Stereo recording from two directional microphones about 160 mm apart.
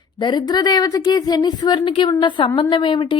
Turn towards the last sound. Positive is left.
turn(degrees=30)  # may be behind; listen again after turning